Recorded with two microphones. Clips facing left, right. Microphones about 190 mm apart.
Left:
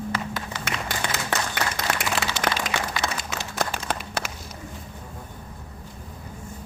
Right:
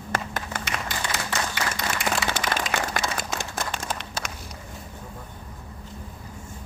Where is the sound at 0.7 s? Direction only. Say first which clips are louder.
Left 1 dB; 55° left (ahead or behind).